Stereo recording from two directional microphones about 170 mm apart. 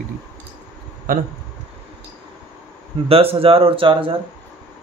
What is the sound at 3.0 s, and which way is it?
Speech, 35° right (ahead or behind).